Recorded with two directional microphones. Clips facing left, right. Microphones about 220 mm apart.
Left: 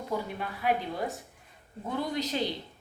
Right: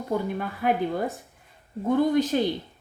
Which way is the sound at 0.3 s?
50° right (ahead or behind).